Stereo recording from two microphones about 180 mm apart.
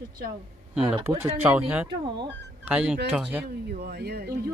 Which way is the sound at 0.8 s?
10° right (ahead or behind).